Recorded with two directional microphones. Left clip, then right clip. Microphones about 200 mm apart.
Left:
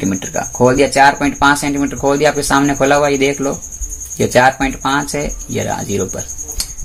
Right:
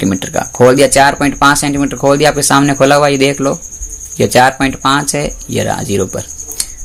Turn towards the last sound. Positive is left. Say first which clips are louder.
# right 3 dB
turn(degrees=-35)  # may be behind; listen again after turning